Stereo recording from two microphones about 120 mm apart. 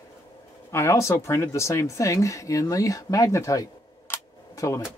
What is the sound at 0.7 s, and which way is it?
Speech, 25° left (ahead or behind).